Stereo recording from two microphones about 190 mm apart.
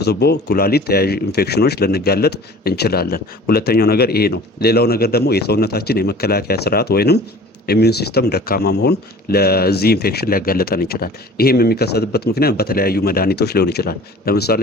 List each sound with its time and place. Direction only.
0.0 s speech: 60° left (ahead or behind)